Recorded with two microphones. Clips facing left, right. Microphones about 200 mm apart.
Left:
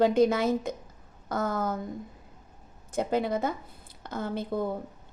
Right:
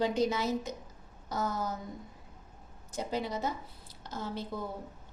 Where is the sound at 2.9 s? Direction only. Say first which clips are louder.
Left 7 dB; 55° left (ahead or behind).